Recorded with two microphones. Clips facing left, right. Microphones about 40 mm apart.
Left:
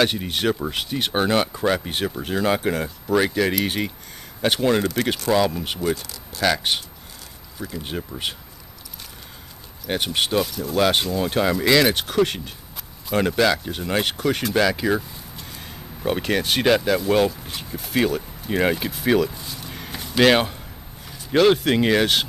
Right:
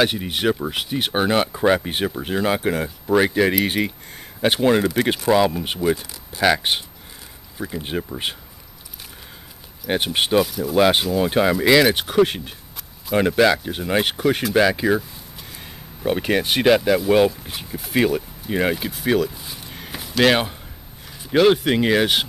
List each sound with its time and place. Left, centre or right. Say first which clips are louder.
0.0 s speech: right 1 dB; centre
9.8 s speech: right 3 dB; centre
10.4 s speech: right 3 dB; centre
19.6 s a sound: even; centre
21.3 s speech: right 1 dB; centre